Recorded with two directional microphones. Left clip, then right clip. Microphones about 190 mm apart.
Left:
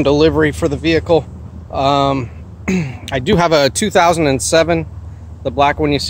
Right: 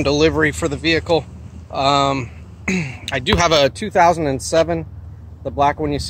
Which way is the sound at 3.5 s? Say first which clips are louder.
Left 2 dB; 50° left (ahead or behind).